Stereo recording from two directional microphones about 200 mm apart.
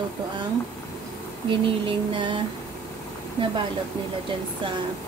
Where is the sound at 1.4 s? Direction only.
25° right (ahead or behind).